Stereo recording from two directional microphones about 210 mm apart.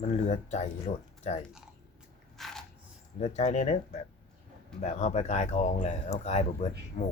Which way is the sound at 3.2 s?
30° left (ahead or behind).